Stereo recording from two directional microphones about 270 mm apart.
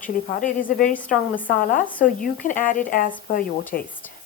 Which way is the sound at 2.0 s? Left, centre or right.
Left.